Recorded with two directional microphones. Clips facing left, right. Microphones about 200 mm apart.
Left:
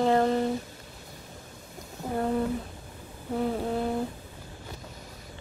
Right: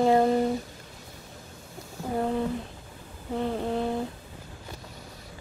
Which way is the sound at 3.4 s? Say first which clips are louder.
Even; 5° left (ahead or behind).